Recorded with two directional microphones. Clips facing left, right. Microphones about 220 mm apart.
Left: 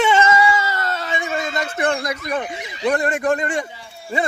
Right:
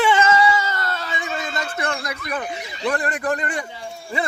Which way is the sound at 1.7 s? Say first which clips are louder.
Left 5 dB; 30° left (ahead or behind).